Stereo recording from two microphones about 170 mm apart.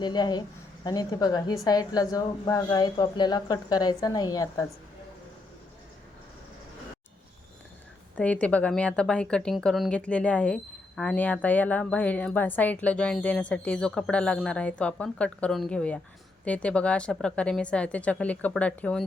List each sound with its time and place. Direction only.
0.0 s a woman's voice: 25° left (ahead or behind)
8.1 s a woman's voice: 10° left (ahead or behind)